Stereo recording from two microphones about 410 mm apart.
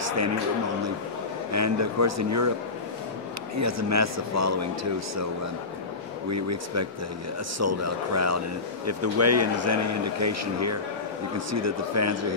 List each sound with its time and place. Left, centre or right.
1.5 s a man's voice: right
3.5 s a man's voice: right
6.3 s a man's voice: right